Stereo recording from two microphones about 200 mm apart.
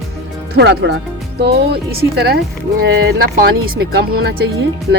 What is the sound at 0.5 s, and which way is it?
Speech, 55° right (ahead or behind).